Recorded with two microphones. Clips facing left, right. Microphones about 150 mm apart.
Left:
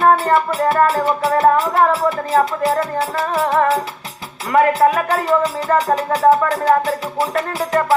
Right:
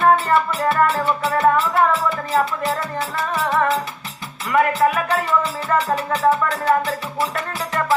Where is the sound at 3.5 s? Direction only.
40° left (ahead or behind).